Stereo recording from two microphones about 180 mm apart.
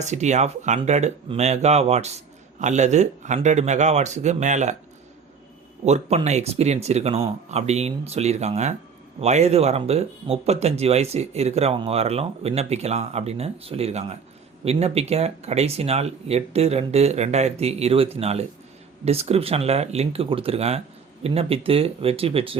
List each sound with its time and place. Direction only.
0.0 s speech: 40° right (ahead or behind)
5.8 s speech: 40° right (ahead or behind)